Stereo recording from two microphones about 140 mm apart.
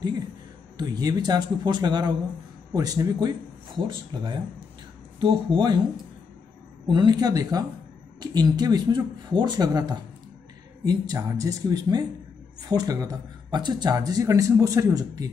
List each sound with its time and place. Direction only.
0.7 s speech: 30° right (ahead or behind)
6.9 s speech: 30° right (ahead or behind)